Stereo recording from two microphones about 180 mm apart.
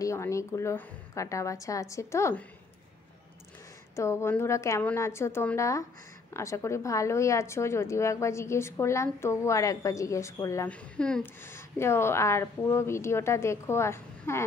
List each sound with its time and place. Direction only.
0.0 s a woman's voice: 15° left (ahead or behind)
3.9 s a woman's voice: 15° left (ahead or behind)